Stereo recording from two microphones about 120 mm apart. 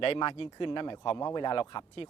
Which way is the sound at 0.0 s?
50° left (ahead or behind).